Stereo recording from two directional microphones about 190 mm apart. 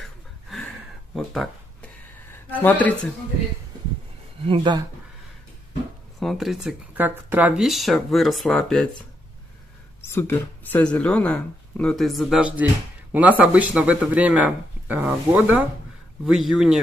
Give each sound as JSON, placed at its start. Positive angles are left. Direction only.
{"t": 0.0, "sound": "a sound", "side_deg": 0}
{"t": 2.5, "sound": "speech", "side_deg": 10}
{"t": 4.5, "sound": "speech", "side_deg": -25}
{"t": 6.1, "sound": "speech", "side_deg": 0}
{"t": 10.0, "sound": "speech", "side_deg": 15}